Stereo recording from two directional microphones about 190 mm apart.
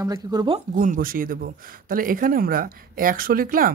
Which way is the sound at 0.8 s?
45° right (ahead or behind).